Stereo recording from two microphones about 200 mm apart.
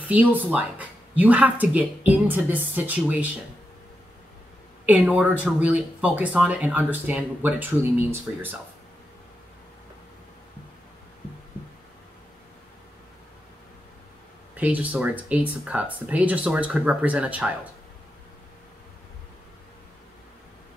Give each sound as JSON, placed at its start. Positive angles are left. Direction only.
{"t": 0.1, "sound": "speech", "side_deg": -10}
{"t": 4.8, "sound": "speech", "side_deg": -5}
{"t": 14.5, "sound": "speech", "side_deg": -10}